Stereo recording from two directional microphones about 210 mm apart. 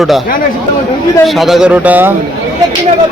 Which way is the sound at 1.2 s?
Centre (ahead or behind).